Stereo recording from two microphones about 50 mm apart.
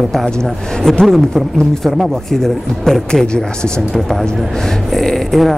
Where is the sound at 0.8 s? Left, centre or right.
Centre.